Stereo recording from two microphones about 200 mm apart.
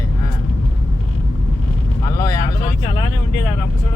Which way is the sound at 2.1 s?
15° left (ahead or behind).